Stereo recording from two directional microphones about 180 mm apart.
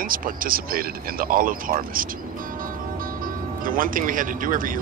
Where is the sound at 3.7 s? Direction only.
50° right (ahead or behind).